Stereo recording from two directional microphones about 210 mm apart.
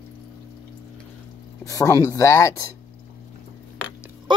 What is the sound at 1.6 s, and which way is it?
Speech, 15° left (ahead or behind).